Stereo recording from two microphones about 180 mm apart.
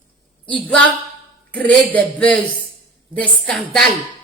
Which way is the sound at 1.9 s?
5° left (ahead or behind).